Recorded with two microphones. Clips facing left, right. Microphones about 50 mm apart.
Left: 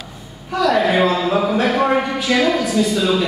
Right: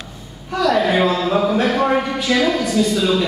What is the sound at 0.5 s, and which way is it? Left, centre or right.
A man's voice, centre.